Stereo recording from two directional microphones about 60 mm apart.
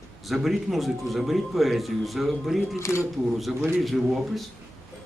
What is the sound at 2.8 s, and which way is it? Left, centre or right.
Speech, left.